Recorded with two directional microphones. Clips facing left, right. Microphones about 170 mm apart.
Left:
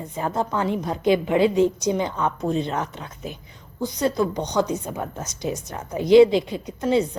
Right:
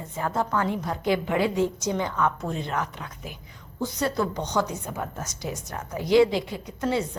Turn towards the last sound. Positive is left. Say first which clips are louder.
# left 5 dB
turn(degrees=20)  # may be behind; listen again after turning